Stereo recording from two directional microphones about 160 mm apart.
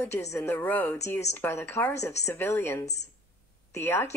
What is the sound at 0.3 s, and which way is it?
Speech, 15° left (ahead or behind).